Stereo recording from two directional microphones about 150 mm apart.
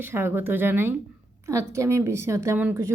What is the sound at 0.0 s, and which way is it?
A woman's voice, 15° right (ahead or behind).